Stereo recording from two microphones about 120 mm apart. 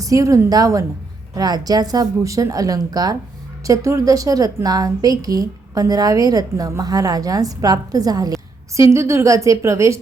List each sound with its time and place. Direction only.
0.0 s a woman's voice: 30° right (ahead or behind)